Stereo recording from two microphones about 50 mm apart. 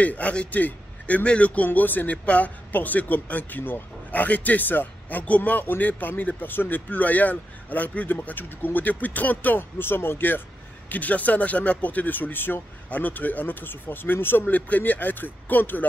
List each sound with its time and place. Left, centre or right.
0.0 s speech: left
10.9 s speech: left